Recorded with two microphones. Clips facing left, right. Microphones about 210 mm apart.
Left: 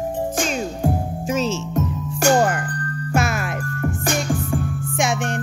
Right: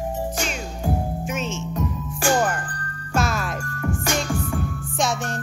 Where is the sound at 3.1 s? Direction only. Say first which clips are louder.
Left 2 dB; 60° left (ahead or behind).